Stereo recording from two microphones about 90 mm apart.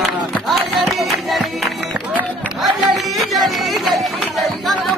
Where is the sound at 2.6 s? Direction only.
Centre (ahead or behind).